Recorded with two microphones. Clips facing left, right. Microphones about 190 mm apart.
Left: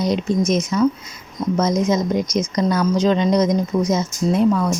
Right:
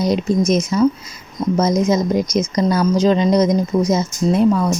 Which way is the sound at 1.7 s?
5° right (ahead or behind).